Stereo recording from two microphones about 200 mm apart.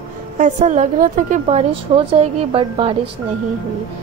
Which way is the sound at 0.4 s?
35° right (ahead or behind).